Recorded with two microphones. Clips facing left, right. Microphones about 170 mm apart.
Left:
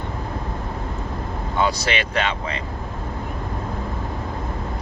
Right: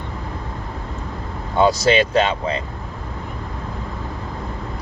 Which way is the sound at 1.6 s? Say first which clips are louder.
Right 9 dB; 30° right (ahead or behind).